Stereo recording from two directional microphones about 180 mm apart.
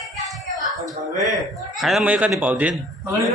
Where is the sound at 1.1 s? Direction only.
45° right (ahead or behind).